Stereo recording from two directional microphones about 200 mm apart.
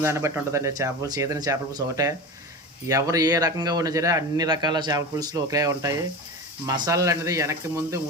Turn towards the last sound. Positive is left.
turn(degrees=-15)  # may be behind; listen again after turning